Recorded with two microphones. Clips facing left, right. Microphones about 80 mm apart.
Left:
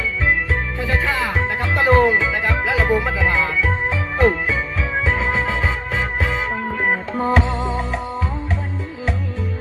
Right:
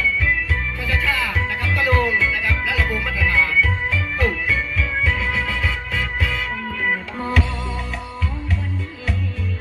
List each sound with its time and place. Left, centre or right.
0.9 s music: left